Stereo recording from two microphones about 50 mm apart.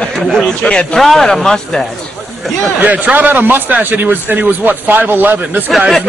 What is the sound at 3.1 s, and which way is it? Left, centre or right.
A man's voice, right.